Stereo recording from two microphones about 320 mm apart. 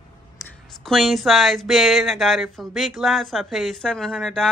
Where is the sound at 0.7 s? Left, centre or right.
Centre.